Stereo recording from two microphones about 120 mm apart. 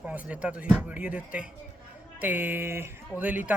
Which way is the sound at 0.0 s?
10° right (ahead or behind).